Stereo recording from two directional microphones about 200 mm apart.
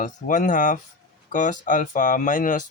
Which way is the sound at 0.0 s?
40° left (ahead or behind).